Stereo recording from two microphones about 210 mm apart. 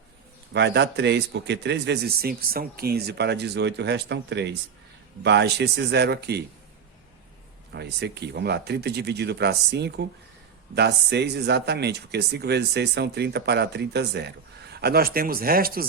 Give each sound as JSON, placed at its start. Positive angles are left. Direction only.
{"t": 0.5, "sound": "speech", "side_deg": -55}
{"t": 7.7, "sound": "speech", "side_deg": -50}